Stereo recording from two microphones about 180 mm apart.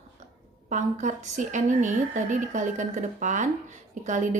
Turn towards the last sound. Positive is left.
turn(degrees=-45)  # may be behind; listen again after turning